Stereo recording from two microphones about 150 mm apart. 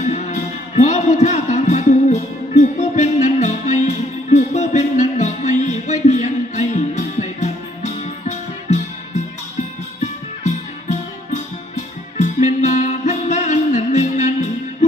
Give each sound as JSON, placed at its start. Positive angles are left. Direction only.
{"t": 0.0, "sound": "music", "side_deg": 50}
{"t": 10.4, "sound": "music", "side_deg": 50}